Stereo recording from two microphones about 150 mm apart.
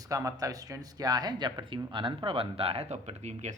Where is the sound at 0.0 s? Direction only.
20° right (ahead or behind).